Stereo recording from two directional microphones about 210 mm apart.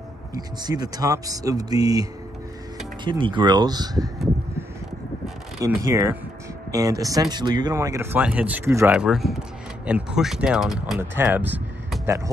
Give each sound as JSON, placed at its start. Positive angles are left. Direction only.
{"t": 0.3, "sound": "speech", "side_deg": -20}
{"t": 5.6, "sound": "speech", "side_deg": -15}